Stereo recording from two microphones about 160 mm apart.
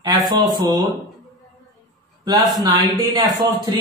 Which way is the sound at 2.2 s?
25° right (ahead or behind).